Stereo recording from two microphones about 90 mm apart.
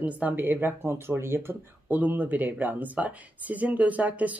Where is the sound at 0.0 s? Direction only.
15° right (ahead or behind).